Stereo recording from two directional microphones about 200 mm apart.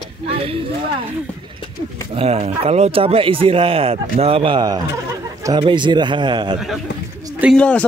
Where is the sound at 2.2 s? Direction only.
30° right (ahead or behind).